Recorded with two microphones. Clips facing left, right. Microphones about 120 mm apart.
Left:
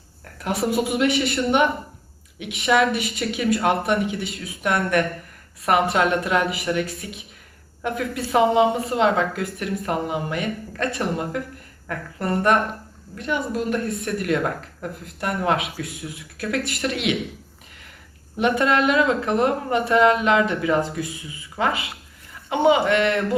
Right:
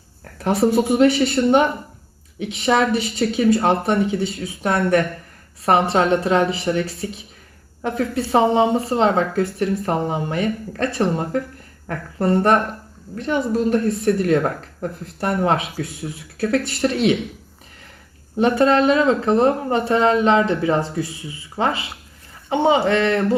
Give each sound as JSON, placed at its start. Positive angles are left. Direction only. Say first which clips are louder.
{"t": 0.3, "sound": "speech", "louder": "right 5 dB", "side_deg": -35}
{"t": 18.3, "sound": "speech", "louder": "right 4 dB", "side_deg": -35}